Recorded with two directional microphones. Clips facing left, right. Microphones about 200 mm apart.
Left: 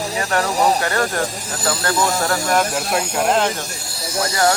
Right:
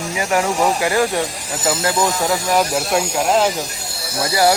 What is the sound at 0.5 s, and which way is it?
Speech, 35° left (ahead or behind).